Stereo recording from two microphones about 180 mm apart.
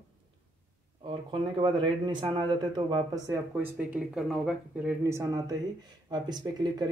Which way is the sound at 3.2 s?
15° right (ahead or behind).